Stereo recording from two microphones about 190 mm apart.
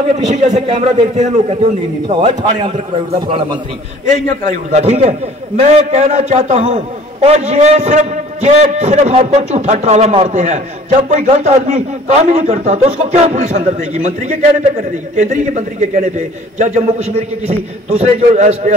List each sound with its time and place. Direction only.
0.3 s a man's voice: 35° right (ahead or behind)
4.5 s a man's voice: 40° right (ahead or behind)